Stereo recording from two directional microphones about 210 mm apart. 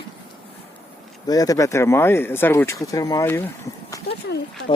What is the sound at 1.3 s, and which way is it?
Speech, 15° left (ahead or behind).